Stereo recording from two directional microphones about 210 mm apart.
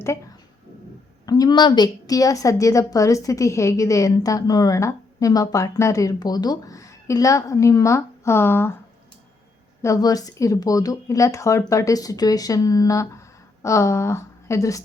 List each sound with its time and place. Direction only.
1.2 s a woman's voice: 20° left (ahead or behind)
9.8 s a woman's voice: 15° left (ahead or behind)